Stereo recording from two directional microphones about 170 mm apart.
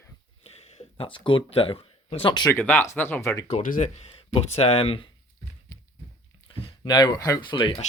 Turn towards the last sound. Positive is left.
turn(degrees=30)  # may be behind; listen again after turning